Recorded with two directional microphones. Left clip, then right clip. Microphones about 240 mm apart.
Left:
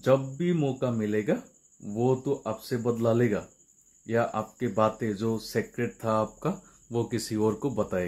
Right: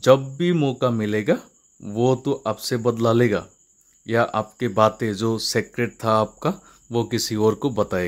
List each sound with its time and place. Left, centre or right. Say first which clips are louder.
0.0 s speech: right 8 dB; right